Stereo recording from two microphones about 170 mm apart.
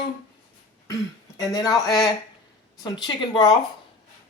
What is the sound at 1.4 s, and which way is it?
A man's voice, 20° left (ahead or behind).